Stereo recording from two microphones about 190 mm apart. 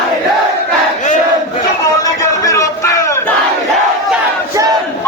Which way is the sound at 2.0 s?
15° left (ahead or behind).